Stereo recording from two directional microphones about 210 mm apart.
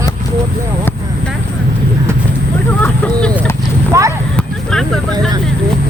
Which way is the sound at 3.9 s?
15° right (ahead or behind).